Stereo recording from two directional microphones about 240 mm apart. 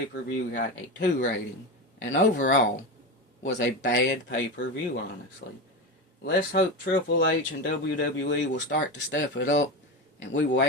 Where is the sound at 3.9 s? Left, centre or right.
Left.